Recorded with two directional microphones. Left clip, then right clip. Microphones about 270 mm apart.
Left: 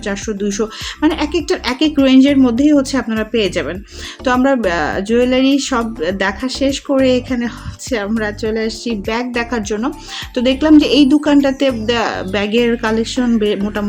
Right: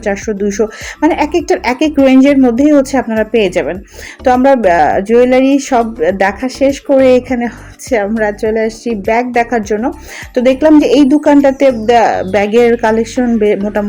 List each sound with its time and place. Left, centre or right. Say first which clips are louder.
0.0 s speech: right 6 dB; centre